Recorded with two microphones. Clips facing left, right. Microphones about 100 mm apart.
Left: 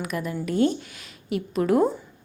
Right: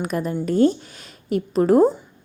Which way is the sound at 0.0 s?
35° right (ahead or behind).